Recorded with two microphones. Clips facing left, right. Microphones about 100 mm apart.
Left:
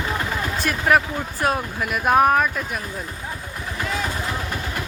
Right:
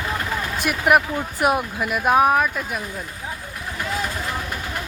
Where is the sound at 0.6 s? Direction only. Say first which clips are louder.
Right 1 dB; 15° right (ahead or behind).